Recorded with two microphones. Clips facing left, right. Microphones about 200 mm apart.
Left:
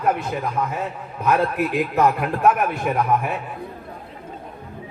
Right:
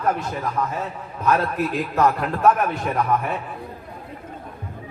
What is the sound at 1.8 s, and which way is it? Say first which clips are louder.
A man's voice: left 1 dB; 10° left (ahead or behind).